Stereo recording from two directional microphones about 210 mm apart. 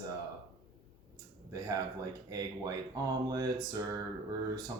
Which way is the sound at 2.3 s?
20° right (ahead or behind).